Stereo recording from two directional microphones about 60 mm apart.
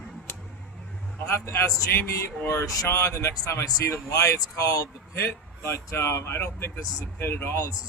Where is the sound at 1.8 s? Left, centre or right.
Left.